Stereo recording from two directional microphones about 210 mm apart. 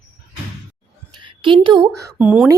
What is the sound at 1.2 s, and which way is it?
Speech, 25° right (ahead or behind).